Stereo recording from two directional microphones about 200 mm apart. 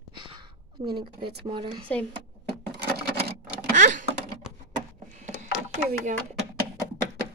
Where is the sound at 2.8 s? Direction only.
55° right (ahead or behind).